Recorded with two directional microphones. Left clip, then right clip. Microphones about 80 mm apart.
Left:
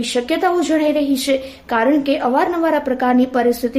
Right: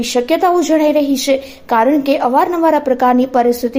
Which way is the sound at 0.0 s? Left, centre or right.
Right.